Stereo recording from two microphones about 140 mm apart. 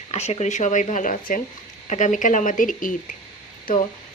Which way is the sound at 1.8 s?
60° left (ahead or behind).